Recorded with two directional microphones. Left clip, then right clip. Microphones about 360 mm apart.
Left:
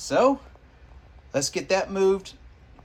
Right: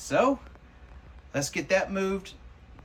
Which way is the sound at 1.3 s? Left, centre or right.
Centre.